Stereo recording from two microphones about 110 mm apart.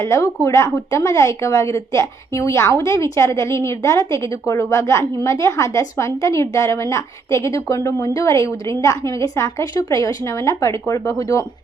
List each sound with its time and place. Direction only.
0.0 s a woman's voice: 25° left (ahead or behind)